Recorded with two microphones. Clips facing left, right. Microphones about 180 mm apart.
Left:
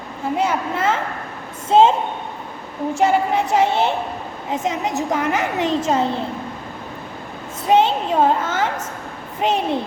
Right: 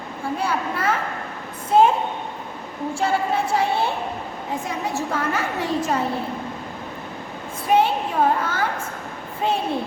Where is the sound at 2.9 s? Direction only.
20° left (ahead or behind).